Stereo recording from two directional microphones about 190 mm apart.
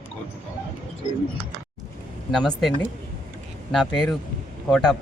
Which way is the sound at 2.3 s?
Centre (ahead or behind).